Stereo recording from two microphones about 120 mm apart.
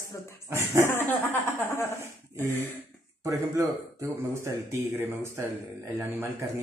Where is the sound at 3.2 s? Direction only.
25° right (ahead or behind).